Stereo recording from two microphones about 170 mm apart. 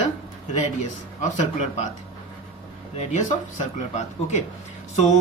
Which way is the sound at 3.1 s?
45° left (ahead or behind).